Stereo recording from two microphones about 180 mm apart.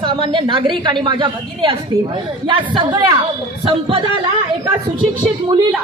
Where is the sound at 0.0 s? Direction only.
25° right (ahead or behind).